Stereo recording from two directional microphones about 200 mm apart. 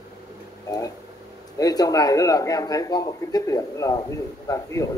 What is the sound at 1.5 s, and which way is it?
A man's voice, 20° left (ahead or behind).